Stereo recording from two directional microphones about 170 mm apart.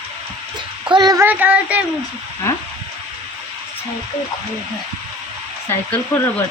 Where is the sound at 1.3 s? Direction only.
10° right (ahead or behind).